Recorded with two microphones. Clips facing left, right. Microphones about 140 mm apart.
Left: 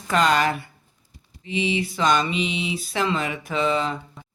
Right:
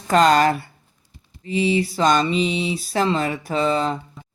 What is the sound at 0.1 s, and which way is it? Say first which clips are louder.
Speech: right 5 dB; 40° right (ahead or behind).